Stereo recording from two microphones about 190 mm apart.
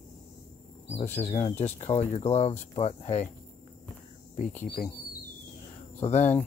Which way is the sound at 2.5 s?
10° left (ahead or behind).